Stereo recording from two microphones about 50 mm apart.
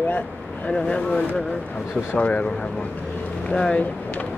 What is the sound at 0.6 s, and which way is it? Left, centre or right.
Speech, left.